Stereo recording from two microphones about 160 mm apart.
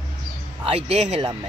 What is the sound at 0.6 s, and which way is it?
Speech, 35° right (ahead or behind).